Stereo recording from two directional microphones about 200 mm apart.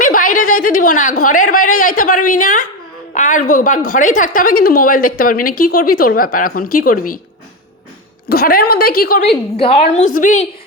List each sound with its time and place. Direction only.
0.0 s a sound: 40° left (ahead or behind)
1.8 s a woman's voice: 45° left (ahead or behind)
8.3 s a woman's voice: 50° left (ahead or behind)
9.6 s a woman's voice: 30° left (ahead or behind)